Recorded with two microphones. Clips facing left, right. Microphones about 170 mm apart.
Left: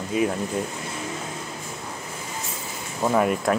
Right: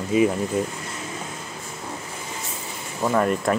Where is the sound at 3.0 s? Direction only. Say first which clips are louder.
Even; 5° left (ahead or behind).